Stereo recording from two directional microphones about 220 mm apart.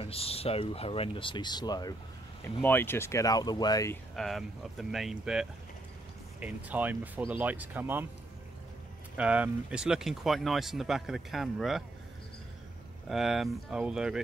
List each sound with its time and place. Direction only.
0.0 s speech: 25° left (ahead or behind)
4.1 s speech: centre (ahead or behind)
9.1 s speech: 5° right (ahead or behind)
13.1 s speech: centre (ahead or behind)